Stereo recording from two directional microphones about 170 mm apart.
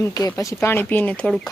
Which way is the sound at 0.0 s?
20° left (ahead or behind).